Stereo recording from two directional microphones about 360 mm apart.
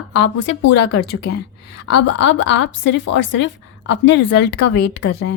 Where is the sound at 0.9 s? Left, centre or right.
Left.